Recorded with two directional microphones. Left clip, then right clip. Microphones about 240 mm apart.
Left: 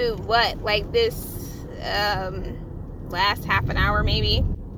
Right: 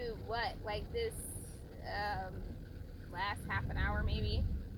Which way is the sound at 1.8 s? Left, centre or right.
Centre.